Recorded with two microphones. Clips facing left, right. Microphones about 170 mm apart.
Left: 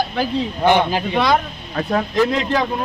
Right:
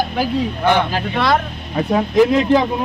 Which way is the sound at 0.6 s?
20° left (ahead or behind).